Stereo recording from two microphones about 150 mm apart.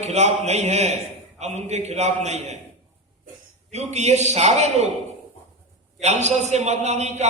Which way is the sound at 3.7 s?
50° right (ahead or behind).